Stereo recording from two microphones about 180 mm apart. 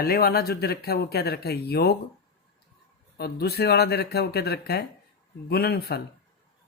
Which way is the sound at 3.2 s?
60° left (ahead or behind).